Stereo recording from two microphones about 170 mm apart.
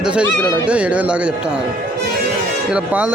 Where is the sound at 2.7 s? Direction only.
5° right (ahead or behind).